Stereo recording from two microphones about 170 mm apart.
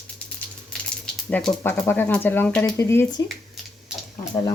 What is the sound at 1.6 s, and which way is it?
Speech, 10° left (ahead or behind).